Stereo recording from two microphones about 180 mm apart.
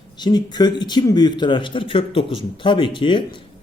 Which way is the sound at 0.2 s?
25° left (ahead or behind).